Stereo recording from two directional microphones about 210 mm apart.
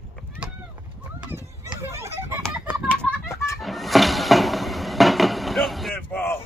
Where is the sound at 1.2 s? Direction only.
10° right (ahead or behind).